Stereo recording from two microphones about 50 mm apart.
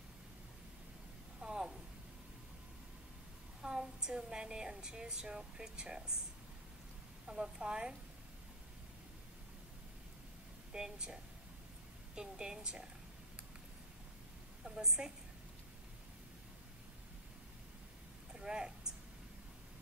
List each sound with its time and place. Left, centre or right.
1.4 s a sound: centre
3.6 s a woman's voice: centre
7.2 s a woman's voice: centre
10.7 s a woman's voice: centre
12.2 s a woman's voice: centre
14.6 s a woman's voice: centre
18.3 s a sound: centre